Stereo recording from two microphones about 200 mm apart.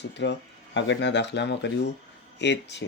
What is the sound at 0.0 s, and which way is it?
Speech, 60° left (ahead or behind).